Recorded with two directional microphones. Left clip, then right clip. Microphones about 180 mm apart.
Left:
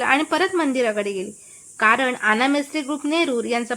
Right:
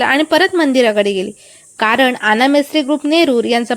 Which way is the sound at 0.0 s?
30° right (ahead or behind).